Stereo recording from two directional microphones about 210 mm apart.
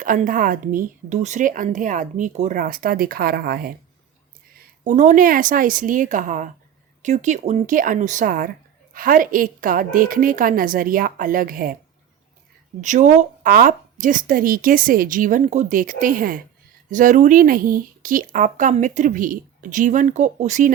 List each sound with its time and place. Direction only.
0.0 s speech: 40° right (ahead or behind)
4.8 s speech: 35° right (ahead or behind)
12.8 s speech: 35° right (ahead or behind)